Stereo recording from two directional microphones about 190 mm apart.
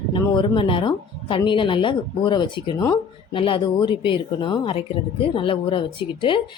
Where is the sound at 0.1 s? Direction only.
25° left (ahead or behind).